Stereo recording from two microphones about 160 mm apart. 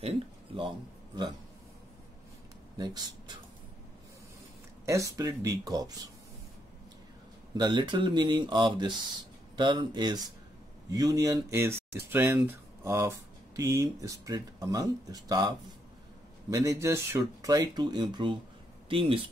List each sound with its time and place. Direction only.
0.6 s a man's voice: 30° right (ahead or behind)
2.8 s speech: 25° right (ahead or behind)
4.8 s speech: 20° right (ahead or behind)
7.5 s speech: 25° right (ahead or behind)